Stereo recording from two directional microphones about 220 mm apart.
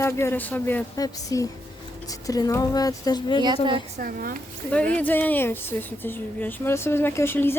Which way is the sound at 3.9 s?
40° right (ahead or behind).